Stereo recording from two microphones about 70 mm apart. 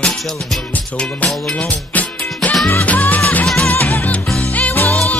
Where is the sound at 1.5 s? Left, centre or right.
Centre.